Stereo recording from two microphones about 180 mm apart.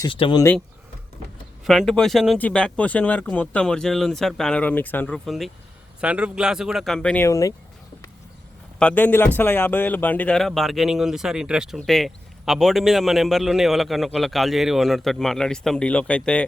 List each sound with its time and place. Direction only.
0.1 s speech: 25° left (ahead or behind)
1.6 s speech: centre (ahead or behind); by 7.5 s 15° left (ahead or behind)
8.8 s speech: 10° left (ahead or behind)